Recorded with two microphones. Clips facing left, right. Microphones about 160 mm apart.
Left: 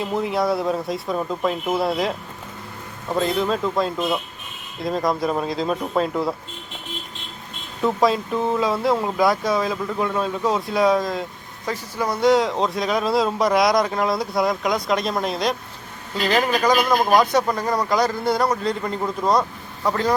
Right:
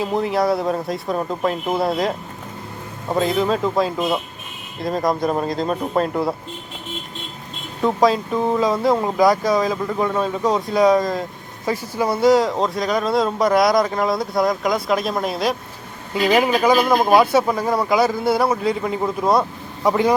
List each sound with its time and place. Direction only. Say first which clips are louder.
0.2 s speech: right 2 dB; centre (ahead or behind)
1.2 s speech: right 1 dB; 15° right (ahead or behind)
1.7 s speech: right 2 dB; centre (ahead or behind)
3.2 s speech: right 2 dB; centre (ahead or behind)
8.0 s speech: right 3 dB; centre (ahead or behind)